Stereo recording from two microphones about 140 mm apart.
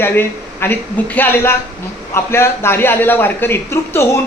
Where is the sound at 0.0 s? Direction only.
15° left (ahead or behind).